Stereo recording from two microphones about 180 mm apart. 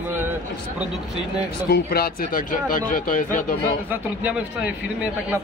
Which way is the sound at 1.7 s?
60° left (ahead or behind).